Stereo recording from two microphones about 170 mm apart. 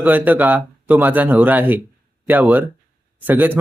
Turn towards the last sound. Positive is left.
turn(degrees=-10)  # may be behind; listen again after turning